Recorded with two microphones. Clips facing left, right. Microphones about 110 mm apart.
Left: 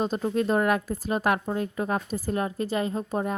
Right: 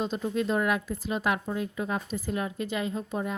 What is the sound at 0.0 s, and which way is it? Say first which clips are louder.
A woman's voice: left 3 dB; 45° left (ahead or behind).